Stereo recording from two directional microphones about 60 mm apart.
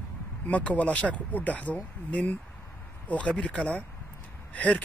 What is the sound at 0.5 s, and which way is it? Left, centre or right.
Speech, left.